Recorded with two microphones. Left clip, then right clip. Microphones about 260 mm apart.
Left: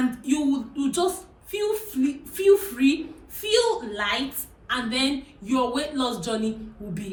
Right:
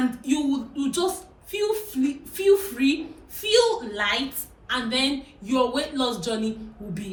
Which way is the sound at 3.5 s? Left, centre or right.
Centre.